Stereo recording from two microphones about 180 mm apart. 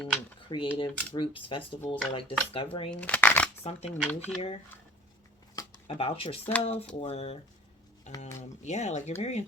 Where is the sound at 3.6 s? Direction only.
35° left (ahead or behind).